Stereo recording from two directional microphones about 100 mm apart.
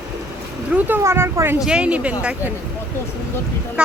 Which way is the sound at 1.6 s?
10° right (ahead or behind).